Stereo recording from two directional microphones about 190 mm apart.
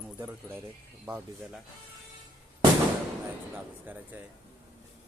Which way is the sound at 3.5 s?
10° right (ahead or behind).